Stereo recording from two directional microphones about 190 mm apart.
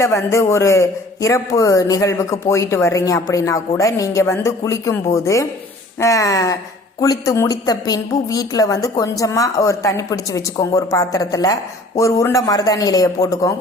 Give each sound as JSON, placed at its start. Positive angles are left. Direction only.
{"t": 0.0, "sound": "a man's voice", "side_deg": 15}